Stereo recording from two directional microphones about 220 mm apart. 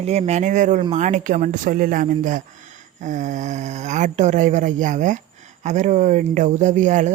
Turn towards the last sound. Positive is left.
turn(degrees=-35)  # may be behind; listen again after turning